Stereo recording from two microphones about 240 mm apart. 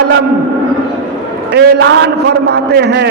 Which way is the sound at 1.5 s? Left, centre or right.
Right.